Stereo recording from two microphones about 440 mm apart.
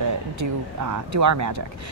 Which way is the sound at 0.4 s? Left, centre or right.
Right.